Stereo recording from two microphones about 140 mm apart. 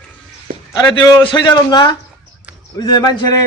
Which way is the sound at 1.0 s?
30° left (ahead or behind).